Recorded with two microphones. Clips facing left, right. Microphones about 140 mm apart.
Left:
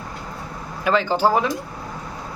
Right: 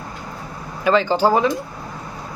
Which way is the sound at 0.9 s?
Centre (ahead or behind).